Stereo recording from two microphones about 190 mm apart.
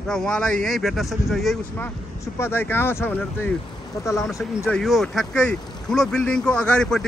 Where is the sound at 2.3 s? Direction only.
10° left (ahead or behind).